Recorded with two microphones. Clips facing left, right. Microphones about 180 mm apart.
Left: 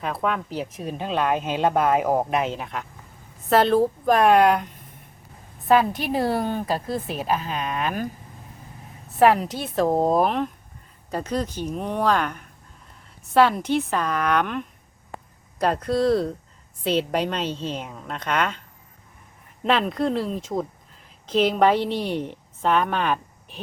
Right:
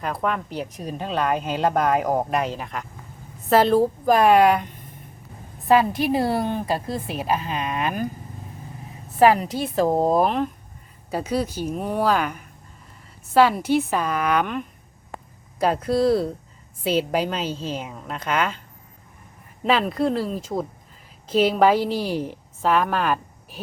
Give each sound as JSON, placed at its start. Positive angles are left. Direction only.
{"t": 0.0, "sound": "speech", "side_deg": 0}
{"t": 9.1, "sound": "speech", "side_deg": 0}
{"t": 19.6, "sound": "a woman's voice", "side_deg": 0}